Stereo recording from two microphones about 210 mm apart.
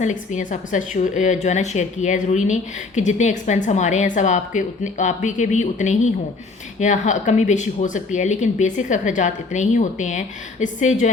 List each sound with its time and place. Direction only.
0.0 s a woman's voice: 35° left (ahead or behind)